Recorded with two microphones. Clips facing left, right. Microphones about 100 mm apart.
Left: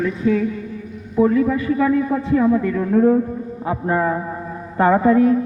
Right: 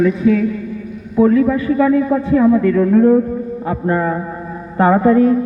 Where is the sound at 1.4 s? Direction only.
55° right (ahead or behind).